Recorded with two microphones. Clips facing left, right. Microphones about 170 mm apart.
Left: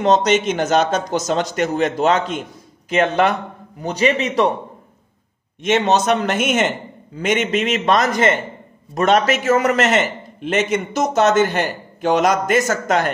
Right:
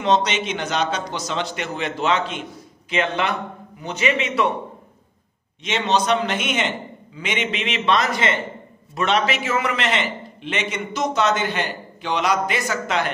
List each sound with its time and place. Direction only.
0.0 s a man's voice: 45° left (ahead or behind)
5.6 s a man's voice: 50° left (ahead or behind)